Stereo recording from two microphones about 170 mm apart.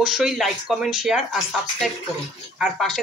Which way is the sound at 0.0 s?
Centre (ahead or behind).